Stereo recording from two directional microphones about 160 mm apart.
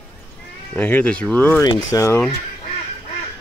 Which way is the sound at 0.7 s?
10° left (ahead or behind).